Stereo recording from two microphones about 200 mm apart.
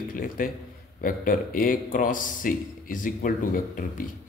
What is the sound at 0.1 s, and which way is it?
A man's voice, 45° left (ahead or behind).